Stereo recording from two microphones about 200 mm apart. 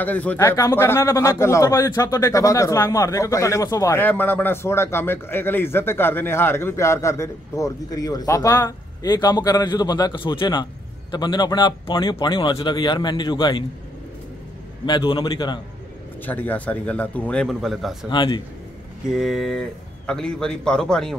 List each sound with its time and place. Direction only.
0.0 s speech: 10° left (ahead or behind)
14.9 s a man's voice: 25° left (ahead or behind)
16.3 s speech: 10° left (ahead or behind)
18.1 s a man's voice: 20° left (ahead or behind)
19.0 s a man's voice: centre (ahead or behind)